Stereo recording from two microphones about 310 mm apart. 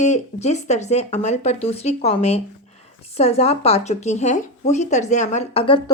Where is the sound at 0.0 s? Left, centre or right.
Left.